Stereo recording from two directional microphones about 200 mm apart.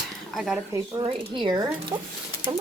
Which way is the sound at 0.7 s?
20° right (ahead or behind).